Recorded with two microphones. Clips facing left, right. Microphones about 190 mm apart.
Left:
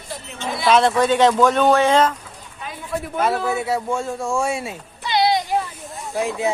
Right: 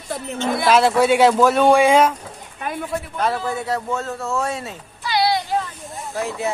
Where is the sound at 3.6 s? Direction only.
10° left (ahead or behind).